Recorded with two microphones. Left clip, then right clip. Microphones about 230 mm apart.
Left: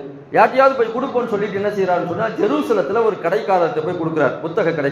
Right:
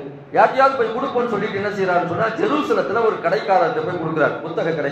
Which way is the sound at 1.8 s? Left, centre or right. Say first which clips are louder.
Right 3 dB; left.